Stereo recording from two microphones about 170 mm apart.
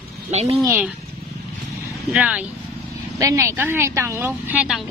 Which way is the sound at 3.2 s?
15° right (ahead or behind).